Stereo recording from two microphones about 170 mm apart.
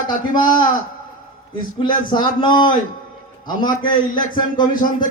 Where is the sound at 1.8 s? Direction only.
25° left (ahead or behind).